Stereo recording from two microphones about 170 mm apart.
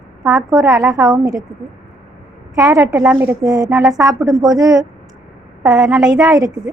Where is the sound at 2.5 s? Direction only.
20° right (ahead or behind).